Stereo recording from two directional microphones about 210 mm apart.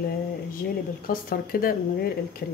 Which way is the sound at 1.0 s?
45° left (ahead or behind).